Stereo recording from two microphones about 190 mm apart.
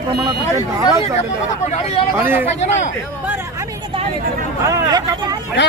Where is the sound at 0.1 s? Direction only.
25° right (ahead or behind).